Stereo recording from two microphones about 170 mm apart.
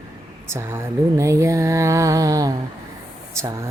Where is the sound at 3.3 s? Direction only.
15° right (ahead or behind).